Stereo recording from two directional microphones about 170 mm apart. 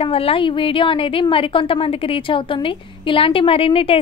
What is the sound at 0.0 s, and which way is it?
A woman's voice, 35° left (ahead or behind).